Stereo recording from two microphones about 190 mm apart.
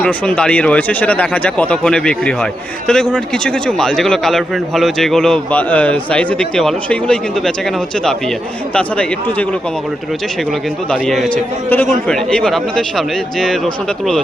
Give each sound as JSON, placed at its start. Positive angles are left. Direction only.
{"t": 0.0, "sound": "speech", "side_deg": 5}
{"t": 8.7, "sound": "speech", "side_deg": 5}
{"t": 10.9, "sound": "speech", "side_deg": 5}